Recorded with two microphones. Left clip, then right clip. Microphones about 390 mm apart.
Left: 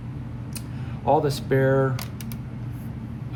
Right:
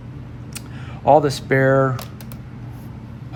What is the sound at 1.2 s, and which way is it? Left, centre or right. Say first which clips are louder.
Speech: right 5 dB; centre.